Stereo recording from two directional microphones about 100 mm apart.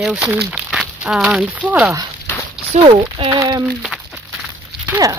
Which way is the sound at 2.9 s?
60° right (ahead or behind).